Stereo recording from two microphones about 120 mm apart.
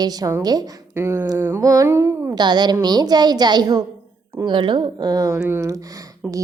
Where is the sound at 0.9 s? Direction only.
20° right (ahead or behind).